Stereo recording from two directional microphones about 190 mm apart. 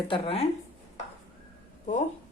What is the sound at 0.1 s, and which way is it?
Speech, 30° left (ahead or behind).